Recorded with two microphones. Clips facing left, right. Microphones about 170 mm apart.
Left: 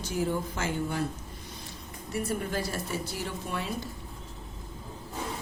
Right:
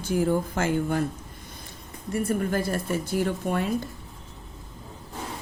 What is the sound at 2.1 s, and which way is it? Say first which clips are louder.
A woman's voice: right 6 dB; 50° right (ahead or behind).